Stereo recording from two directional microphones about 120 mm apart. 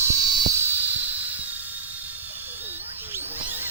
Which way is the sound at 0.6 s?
15° right (ahead or behind).